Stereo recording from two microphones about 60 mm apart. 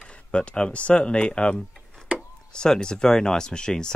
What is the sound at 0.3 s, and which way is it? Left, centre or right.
Speech, centre.